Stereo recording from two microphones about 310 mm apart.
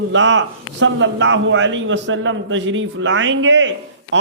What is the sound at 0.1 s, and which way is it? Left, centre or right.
A man's voice, right.